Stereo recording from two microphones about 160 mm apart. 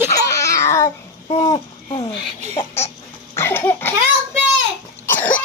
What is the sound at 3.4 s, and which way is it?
Cough, 15° left (ahead or behind).